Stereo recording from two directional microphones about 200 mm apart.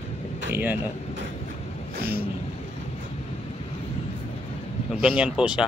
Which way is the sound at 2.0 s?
50° right (ahead or behind).